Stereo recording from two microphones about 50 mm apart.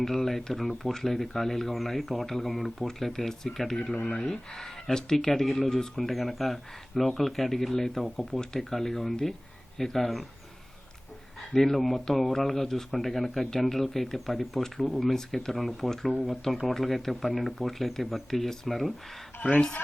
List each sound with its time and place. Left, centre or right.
0.0 s speech: centre
11.5 s speech: centre
19.4 s speech: left